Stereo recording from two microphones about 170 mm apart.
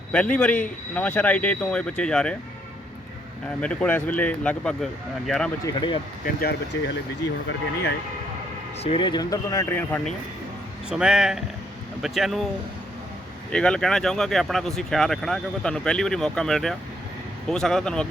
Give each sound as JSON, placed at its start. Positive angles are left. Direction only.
{"t": 0.1, "sound": "speech", "side_deg": 5}
{"t": 3.6, "sound": "speech", "side_deg": 5}
{"t": 5.6, "sound": "speech", "side_deg": 25}
{"t": 6.2, "sound": "speech", "side_deg": 65}
{"t": 8.8, "sound": "speech", "side_deg": 30}
{"t": 10.8, "sound": "speech", "side_deg": -5}
{"t": 13.5, "sound": "speech", "side_deg": 5}